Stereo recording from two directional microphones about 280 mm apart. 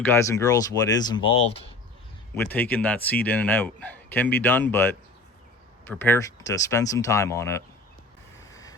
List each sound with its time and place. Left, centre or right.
0.0 s speech: centre
2.3 s speech: centre